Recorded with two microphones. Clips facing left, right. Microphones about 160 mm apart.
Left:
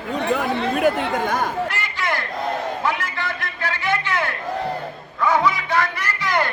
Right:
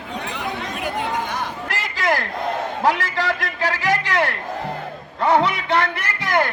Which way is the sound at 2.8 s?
90° right.